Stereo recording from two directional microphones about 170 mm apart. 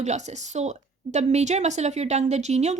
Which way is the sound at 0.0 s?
40° right (ahead or behind).